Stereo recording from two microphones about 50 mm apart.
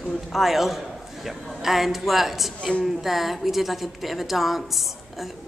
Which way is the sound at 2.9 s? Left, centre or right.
Centre.